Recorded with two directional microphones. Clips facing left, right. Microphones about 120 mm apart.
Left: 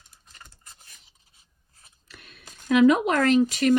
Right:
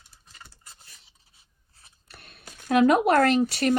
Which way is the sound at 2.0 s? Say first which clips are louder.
Right 1 dB; 40° right (ahead or behind).